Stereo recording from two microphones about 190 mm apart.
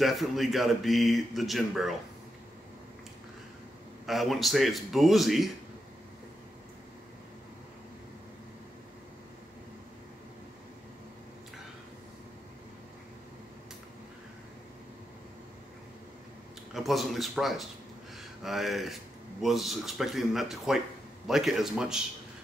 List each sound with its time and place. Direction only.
0.0 s speech: centre (ahead or behind)
4.0 s speech: centre (ahead or behind)
16.7 s speech: centre (ahead or behind)